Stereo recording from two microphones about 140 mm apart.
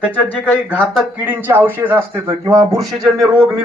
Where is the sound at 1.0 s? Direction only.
15° right (ahead or behind).